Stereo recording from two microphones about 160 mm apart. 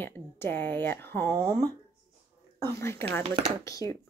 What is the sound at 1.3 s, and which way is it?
Speech, 20° right (ahead or behind).